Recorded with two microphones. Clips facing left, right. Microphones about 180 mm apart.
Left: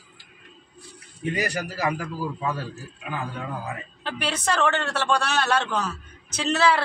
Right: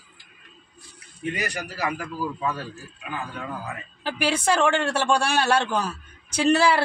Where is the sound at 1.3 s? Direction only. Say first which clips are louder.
Left 3 dB; 35° left (ahead or behind).